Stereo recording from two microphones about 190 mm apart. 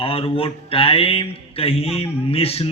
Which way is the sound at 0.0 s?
30° left (ahead or behind).